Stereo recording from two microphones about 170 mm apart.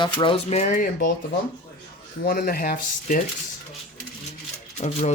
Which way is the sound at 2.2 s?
60° left (ahead or behind).